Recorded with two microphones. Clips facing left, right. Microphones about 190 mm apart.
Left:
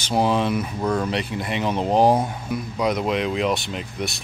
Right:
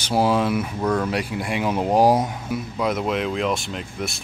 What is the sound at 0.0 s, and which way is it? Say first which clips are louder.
Speech: right 1 dB; 5° right (ahead or behind).